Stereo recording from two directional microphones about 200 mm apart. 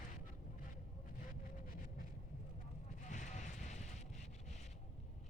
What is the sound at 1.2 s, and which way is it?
Vehicle, 45° left (ahead or behind).